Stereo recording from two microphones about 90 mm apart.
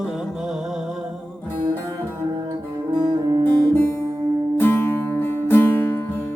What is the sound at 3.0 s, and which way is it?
Music, 50° right (ahead or behind).